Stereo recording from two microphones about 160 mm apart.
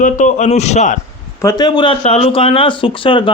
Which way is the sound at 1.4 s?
20° left (ahead or behind).